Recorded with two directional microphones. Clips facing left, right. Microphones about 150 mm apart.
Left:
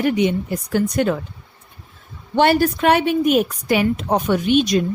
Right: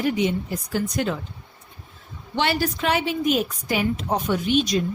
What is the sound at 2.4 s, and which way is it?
A woman's voice, 50° left (ahead or behind).